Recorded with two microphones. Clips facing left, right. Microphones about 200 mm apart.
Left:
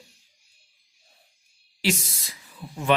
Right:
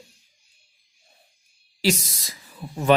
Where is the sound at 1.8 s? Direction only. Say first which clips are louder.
Right 3 dB; 40° right (ahead or behind).